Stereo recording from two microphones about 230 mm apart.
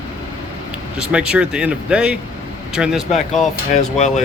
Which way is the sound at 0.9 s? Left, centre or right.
Centre.